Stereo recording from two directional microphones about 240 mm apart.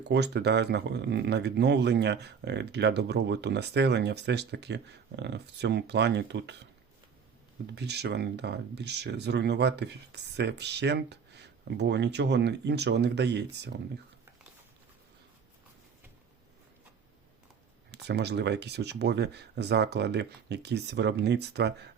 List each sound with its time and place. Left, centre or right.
0.0 s speech: right
7.8 s speech: right
17.9 s speech: right